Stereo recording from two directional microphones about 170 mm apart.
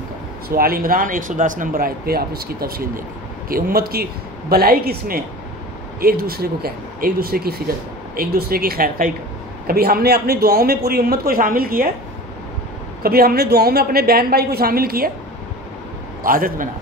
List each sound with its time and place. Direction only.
0.5 s speech: 60° right (ahead or behind)
13.0 s speech: 60° right (ahead or behind)
16.2 s a man's voice: 55° right (ahead or behind)